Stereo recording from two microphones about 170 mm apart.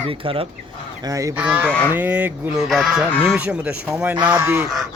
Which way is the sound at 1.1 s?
20° right (ahead or behind).